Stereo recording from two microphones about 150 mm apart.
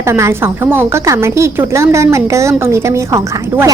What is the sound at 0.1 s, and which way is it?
A woman's voice, 15° right (ahead or behind).